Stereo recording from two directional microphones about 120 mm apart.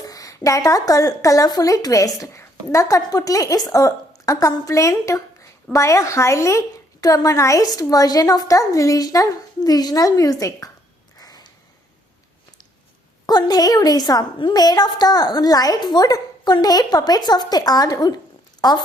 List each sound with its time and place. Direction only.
0.0 s a woman's voice: 30° left (ahead or behind)
11.2 s a sound: 30° left (ahead or behind)
13.2 s a woman's voice: 35° left (ahead or behind)